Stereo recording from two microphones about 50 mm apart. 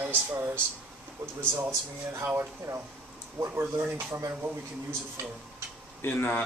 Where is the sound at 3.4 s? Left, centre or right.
Right.